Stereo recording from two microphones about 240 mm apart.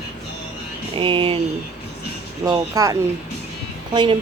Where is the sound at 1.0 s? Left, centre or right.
Right.